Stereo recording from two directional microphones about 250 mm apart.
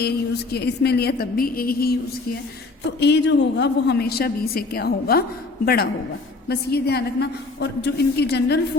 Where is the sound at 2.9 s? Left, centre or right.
Left.